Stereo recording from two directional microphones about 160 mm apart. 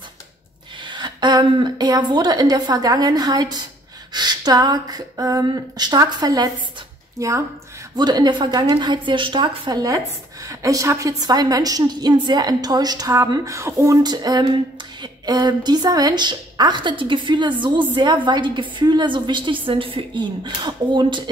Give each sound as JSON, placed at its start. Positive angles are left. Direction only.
{"t": 0.8, "sound": "a woman's voice", "side_deg": -30}